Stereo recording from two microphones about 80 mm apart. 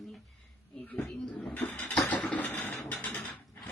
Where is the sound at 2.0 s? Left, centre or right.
Centre.